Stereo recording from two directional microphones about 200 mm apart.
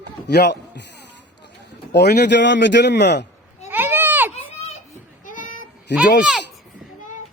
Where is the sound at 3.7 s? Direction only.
10° right (ahead or behind).